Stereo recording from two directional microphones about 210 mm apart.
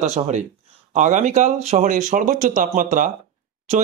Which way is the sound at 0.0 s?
35° right (ahead or behind).